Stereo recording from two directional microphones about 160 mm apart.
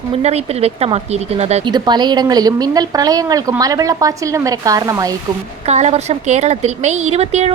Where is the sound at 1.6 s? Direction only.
25° right (ahead or behind).